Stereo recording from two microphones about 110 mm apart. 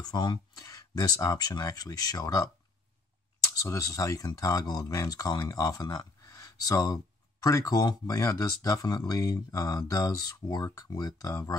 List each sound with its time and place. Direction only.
0.0 s speech: 40° left (ahead or behind)
3.5 s speech: 30° left (ahead or behind)